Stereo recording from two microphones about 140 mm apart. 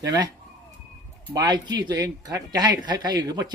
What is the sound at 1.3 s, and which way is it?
Speech, 30° right (ahead or behind).